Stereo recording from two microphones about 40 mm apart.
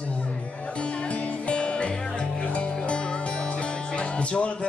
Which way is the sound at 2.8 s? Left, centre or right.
Left.